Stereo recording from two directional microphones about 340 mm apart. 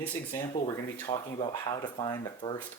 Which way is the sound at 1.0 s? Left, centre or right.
Centre.